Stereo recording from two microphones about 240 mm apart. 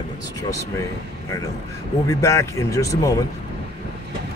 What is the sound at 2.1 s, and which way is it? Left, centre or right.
A man's voice, centre.